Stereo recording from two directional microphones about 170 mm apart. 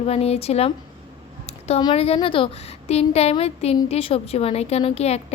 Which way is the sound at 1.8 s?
35° left (ahead or behind).